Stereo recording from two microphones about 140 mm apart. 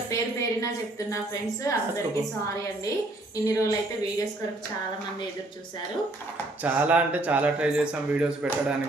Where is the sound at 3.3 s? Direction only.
25° left (ahead or behind).